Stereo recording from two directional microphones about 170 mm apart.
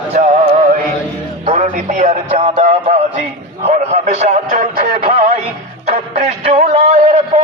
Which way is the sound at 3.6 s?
40° right (ahead or behind).